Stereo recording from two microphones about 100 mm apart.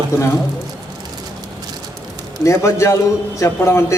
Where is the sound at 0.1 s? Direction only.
30° left (ahead or behind).